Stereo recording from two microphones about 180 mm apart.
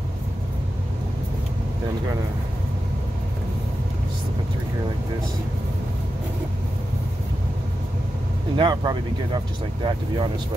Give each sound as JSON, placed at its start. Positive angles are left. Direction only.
{"t": 8.5, "sound": "speech", "side_deg": -25}